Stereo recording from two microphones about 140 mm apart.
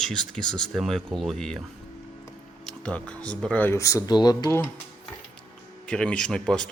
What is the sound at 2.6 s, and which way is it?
Speech, 5° left (ahead or behind).